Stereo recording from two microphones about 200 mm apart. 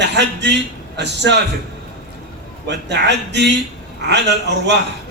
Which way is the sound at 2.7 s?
60° right (ahead or behind).